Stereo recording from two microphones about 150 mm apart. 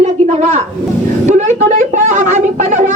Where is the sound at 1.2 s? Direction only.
55° right (ahead or behind).